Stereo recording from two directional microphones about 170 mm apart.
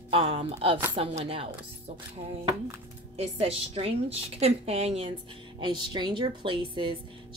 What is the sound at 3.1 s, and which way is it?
Speech, 35° right (ahead or behind).